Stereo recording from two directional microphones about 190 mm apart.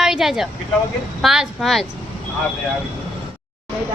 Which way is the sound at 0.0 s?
Centre (ahead or behind).